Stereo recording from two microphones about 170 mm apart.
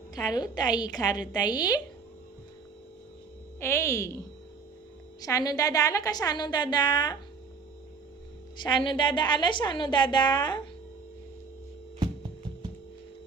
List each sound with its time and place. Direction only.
0.3 s a woman's voice: 25° left (ahead or behind)
3.6 s a woman's voice: 15° left (ahead or behind)
5.2 s a woman's voice: 20° left (ahead or behind)
8.5 s a woman's voice: 30° left (ahead or behind)